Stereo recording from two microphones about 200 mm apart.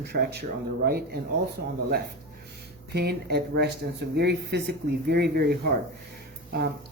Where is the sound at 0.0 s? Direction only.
55° right (ahead or behind).